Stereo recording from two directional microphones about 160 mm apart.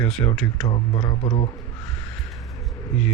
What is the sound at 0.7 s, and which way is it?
Speech, 30° left (ahead or behind).